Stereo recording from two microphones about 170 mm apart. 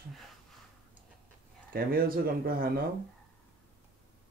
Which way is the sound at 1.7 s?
60° right (ahead or behind).